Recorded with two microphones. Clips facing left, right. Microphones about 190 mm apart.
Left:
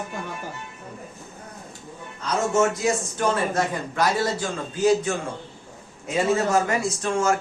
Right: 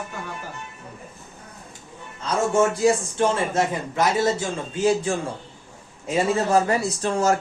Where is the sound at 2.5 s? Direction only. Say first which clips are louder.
Right 3 dB; 30° right (ahead or behind).